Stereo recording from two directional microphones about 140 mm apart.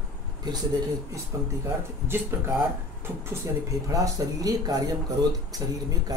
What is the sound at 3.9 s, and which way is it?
Speech, 25° right (ahead or behind).